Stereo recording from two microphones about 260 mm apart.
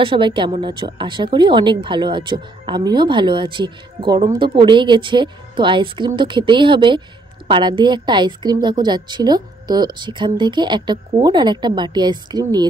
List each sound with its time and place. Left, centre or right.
0.0 s speech: centre